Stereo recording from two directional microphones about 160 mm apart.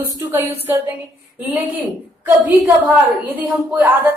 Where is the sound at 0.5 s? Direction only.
40° right (ahead or behind).